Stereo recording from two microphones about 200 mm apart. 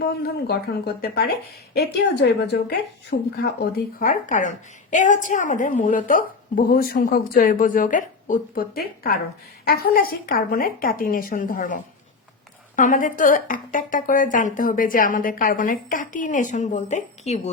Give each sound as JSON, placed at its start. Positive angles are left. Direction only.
{"t": 0.0, "sound": "a woman's voice", "side_deg": 55}